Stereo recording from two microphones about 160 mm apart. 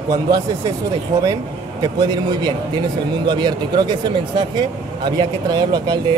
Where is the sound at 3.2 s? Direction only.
30° right (ahead or behind).